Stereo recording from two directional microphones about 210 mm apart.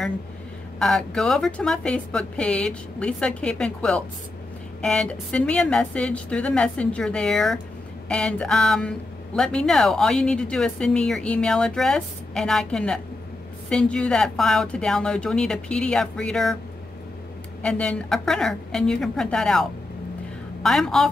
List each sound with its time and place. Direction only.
0.7 s speech: centre (ahead or behind)
17.6 s speech: 5° left (ahead or behind)